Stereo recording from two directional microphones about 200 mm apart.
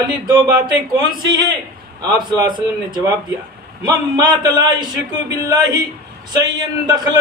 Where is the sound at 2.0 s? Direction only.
20° right (ahead or behind).